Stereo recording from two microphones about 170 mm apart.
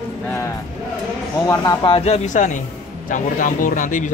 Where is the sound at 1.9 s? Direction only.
35° left (ahead or behind).